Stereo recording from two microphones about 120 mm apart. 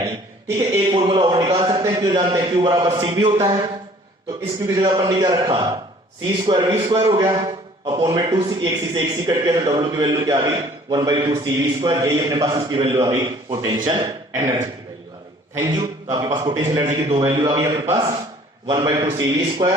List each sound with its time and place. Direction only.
0.5 s a man's voice: 30° right (ahead or behind)
0.9 s a man's voice: 40° right (ahead or behind)
4.7 s a man's voice: 30° right (ahead or behind)
13.7 s a man's voice: 40° right (ahead or behind)
14.0 s a man's voice: 25° right (ahead or behind)
17.2 s a man's voice: 25° right (ahead or behind)